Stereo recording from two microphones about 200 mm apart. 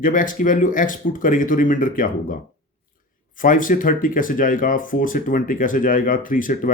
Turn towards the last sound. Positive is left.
turn(degrees=40)  # may be behind; listen again after turning